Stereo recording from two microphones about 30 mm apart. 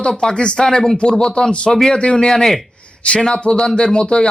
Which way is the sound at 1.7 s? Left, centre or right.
Centre.